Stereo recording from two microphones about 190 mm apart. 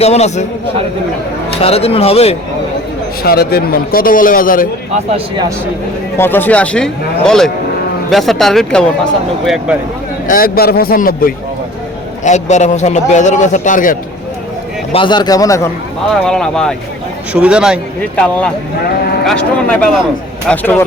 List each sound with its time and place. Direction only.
0.0 s a man's voice: 35° left (ahead or behind)
1.6 s a man's voice: 30° left (ahead or behind)
3.2 s a man's voice: 55° left (ahead or behind)
6.1 s speech: 10° left (ahead or behind)
10.2 s a man's voice: 50° left (ahead or behind)
12.2 s a man's voice: 40° left (ahead or behind)
14.9 s a man's voice: 25° left (ahead or behind)
16.2 s speech: 5° left (ahead or behind)
18.0 s speech: 5° left (ahead or behind)